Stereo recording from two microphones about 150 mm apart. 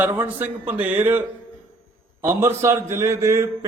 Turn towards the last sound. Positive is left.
turn(degrees=-20)  # may be behind; listen again after turning